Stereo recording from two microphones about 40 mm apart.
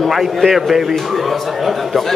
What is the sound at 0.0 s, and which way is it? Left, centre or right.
A man's voice, centre.